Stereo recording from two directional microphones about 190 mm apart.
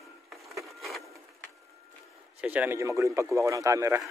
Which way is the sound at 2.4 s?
10° right (ahead or behind).